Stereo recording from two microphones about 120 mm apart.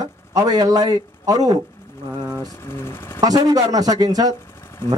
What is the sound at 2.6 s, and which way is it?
Speech, 20° left (ahead or behind).